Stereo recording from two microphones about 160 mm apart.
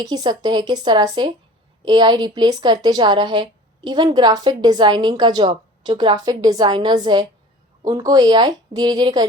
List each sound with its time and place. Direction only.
0.0 s a woman's voice: 25° right (ahead or behind)